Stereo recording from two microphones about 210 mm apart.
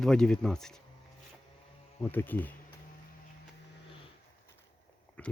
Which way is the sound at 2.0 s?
10° left (ahead or behind).